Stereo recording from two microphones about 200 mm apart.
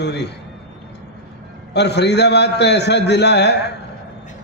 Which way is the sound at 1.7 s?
55° left (ahead or behind).